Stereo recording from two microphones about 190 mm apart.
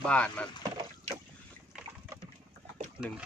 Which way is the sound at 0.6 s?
25° right (ahead or behind).